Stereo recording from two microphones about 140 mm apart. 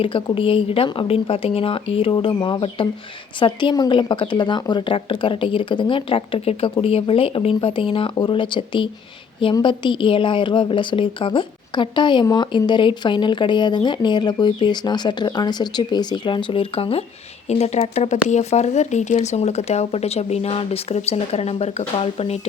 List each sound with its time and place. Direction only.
0.0 s speech: 40° left (ahead or behind)